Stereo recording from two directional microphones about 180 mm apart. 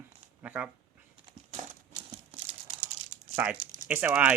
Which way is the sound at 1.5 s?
40° right (ahead or behind).